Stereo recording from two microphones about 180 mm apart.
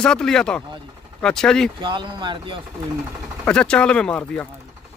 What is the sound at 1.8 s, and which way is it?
Speech, 25° right (ahead or behind).